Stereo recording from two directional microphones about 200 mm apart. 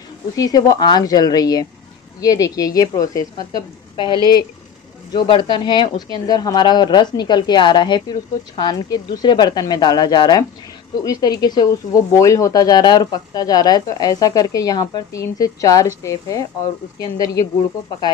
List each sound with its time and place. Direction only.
0.4 s speech: 20° left (ahead or behind)